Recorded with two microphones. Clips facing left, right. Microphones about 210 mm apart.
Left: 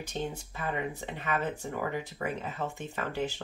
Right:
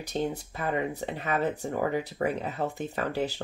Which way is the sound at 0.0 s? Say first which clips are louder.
Right 5 dB; 40° right (ahead or behind).